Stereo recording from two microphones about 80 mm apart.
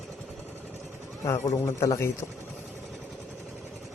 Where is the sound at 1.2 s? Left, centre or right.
Left.